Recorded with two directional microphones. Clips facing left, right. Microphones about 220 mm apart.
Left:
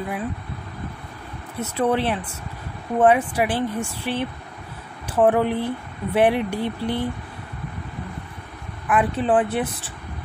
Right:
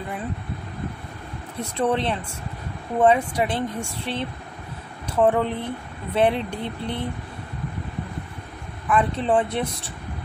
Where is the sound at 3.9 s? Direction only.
25° right (ahead or behind).